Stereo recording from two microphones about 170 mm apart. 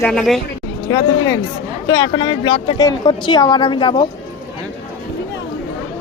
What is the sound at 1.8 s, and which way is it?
Speech, 25° left (ahead or behind).